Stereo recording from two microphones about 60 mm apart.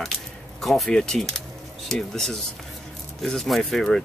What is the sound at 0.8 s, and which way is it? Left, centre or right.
Speech, centre.